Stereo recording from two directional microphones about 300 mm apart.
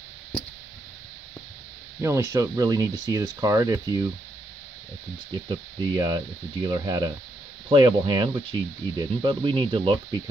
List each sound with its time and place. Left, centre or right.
2.0 s speech: centre
5.3 s speech: centre